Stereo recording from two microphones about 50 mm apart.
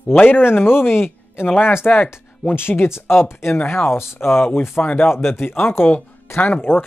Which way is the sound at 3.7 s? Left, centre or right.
Left.